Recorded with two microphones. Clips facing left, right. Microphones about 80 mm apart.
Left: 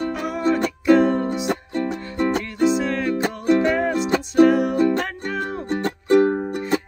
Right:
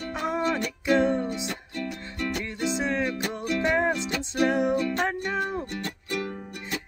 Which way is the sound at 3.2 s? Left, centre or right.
Left.